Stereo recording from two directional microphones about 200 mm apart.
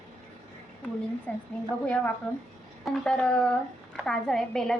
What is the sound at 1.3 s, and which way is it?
Speech, 10° left (ahead or behind).